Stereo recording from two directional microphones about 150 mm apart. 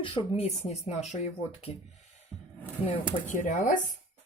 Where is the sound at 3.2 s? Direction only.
60° left (ahead or behind).